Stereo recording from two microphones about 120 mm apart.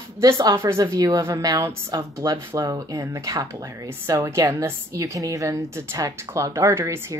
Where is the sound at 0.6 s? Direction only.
25° right (ahead or behind).